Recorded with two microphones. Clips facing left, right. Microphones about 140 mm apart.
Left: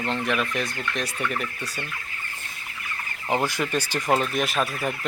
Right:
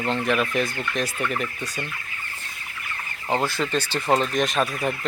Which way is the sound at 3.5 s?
15° left (ahead or behind).